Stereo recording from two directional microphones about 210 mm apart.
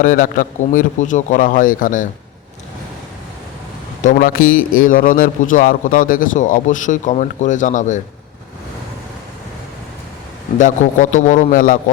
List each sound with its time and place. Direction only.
0.0 s a man's voice: 40° left (ahead or behind)
4.0 s a man's voice: 40° left (ahead or behind)
10.6 s a man's voice: 40° left (ahead or behind)